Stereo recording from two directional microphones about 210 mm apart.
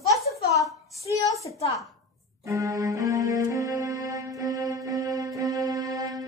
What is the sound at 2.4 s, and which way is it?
Music, 15° right (ahead or behind).